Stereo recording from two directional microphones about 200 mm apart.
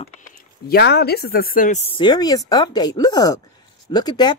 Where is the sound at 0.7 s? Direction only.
55° left (ahead or behind).